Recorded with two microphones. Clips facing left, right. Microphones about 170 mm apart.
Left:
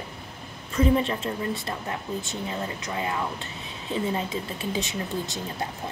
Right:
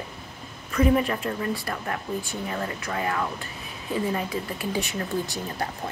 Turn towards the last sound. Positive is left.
turn(degrees=20)  # may be behind; listen again after turning